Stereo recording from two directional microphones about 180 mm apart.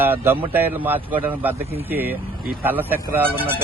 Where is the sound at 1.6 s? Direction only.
35° right (ahead or behind).